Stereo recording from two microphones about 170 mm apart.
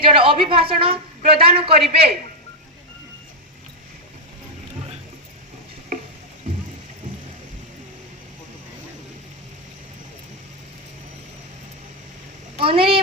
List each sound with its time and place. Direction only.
0.0 s a woman's voice: 30° right (ahead or behind)
12.5 s speech: 30° right (ahead or behind)